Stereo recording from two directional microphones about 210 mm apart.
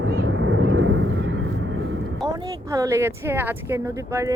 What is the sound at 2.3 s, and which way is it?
Speech, 15° right (ahead or behind).